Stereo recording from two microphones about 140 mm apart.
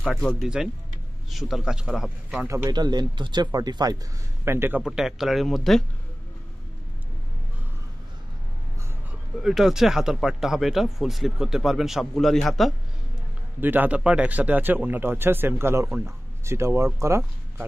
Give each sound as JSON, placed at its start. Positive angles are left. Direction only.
{"t": 0.0, "sound": "speech", "side_deg": 5}
{"t": 2.4, "sound": "speech", "side_deg": -20}
{"t": 2.7, "sound": "speech", "side_deg": -30}
{"t": 4.5, "sound": "speech", "side_deg": -15}
{"t": 4.8, "sound": "speech", "side_deg": -5}
{"t": 9.4, "sound": "speech", "side_deg": -5}
{"t": 13.6, "sound": "speech", "side_deg": -15}